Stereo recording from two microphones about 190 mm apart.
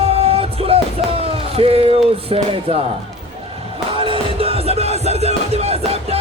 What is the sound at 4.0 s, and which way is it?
Music, 30° right (ahead or behind).